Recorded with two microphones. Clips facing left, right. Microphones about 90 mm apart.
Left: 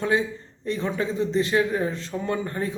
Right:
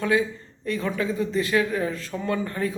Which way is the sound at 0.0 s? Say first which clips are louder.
Right 1 dB; 25° left (ahead or behind).